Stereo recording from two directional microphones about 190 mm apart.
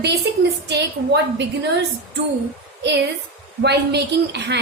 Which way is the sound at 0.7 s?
65° right (ahead or behind).